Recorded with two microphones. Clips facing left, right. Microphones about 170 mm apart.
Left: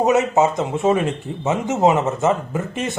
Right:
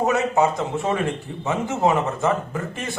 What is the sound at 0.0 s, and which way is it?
A man's voice, 20° left (ahead or behind).